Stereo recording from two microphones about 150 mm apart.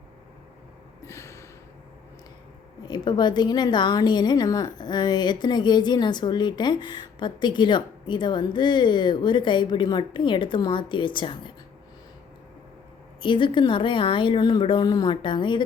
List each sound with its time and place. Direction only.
1.0 s a sound: 20° left (ahead or behind)
2.8 s a woman's voice: 30° left (ahead or behind)
13.2 s a woman's voice: 35° left (ahead or behind)